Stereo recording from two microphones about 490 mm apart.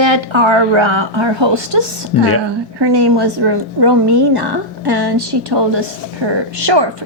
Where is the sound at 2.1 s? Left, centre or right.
Left.